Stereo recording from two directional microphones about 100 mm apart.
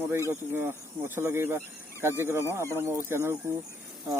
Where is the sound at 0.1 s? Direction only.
25° right (ahead or behind).